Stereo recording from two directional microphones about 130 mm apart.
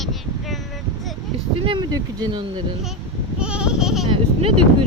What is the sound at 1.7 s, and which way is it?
Speech, 35° right (ahead or behind).